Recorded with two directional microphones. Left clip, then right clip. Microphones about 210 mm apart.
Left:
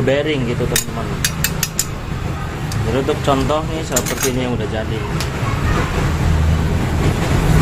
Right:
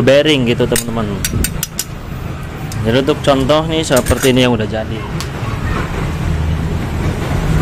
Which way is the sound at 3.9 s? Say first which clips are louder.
Right 7 dB; 45° right (ahead or behind).